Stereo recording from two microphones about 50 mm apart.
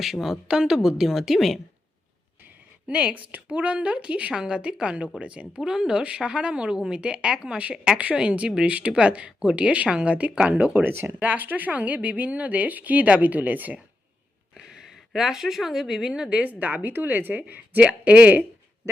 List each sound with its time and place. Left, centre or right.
0.0 s a woman's voice: centre
2.8 s a woman's voice: right
10.8 s speech: right
11.2 s speech: right
14.5 s speech: centre
16.4 s a woman's voice: right